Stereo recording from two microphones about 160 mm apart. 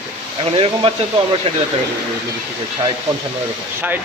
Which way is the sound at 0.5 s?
35° right (ahead or behind).